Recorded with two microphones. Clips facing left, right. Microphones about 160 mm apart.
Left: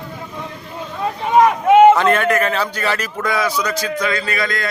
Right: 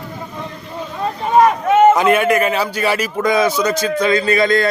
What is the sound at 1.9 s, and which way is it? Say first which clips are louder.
Speech: right 2 dB; 10° right (ahead or behind).